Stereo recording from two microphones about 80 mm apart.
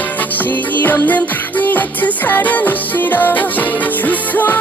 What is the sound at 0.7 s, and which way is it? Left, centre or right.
Music, left.